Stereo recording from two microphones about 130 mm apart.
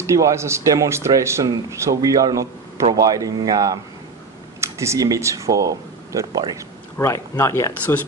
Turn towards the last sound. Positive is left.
turn(degrees=20)  # may be behind; listen again after turning